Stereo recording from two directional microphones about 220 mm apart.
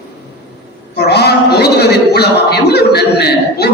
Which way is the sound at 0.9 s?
50° left (ahead or behind).